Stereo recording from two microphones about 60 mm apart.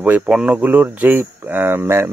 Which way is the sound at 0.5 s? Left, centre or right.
Right.